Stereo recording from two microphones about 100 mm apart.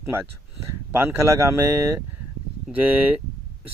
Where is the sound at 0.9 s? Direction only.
25° right (ahead or behind).